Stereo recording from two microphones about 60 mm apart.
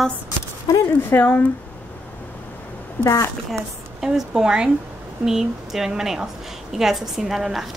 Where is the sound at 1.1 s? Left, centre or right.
Left.